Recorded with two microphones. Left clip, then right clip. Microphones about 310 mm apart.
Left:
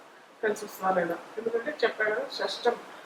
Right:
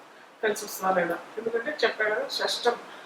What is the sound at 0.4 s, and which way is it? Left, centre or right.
Speech, centre.